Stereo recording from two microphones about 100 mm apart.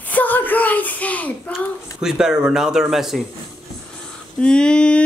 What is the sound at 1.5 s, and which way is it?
Speech, 5° right (ahead or behind).